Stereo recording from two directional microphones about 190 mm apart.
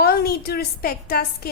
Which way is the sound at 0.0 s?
55° left (ahead or behind).